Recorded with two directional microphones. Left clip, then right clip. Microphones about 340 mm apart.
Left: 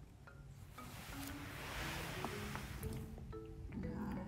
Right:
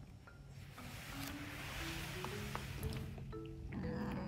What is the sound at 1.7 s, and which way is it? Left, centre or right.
Music, left.